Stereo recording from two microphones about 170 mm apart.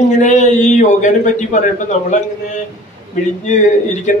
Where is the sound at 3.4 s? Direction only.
45° left (ahead or behind).